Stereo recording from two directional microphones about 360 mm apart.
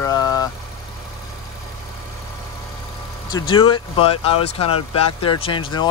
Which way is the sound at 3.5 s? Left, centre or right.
Centre.